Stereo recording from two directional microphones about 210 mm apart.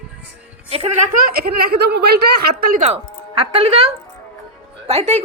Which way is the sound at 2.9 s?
25° right (ahead or behind).